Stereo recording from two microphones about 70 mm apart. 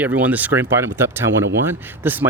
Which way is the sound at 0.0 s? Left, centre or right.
Right.